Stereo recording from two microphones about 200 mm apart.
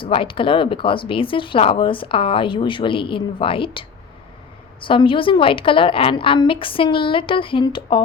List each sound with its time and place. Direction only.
0.0 s speech: 25° left (ahead or behind)